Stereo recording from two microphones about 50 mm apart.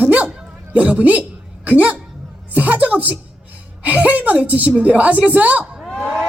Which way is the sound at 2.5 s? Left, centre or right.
Right.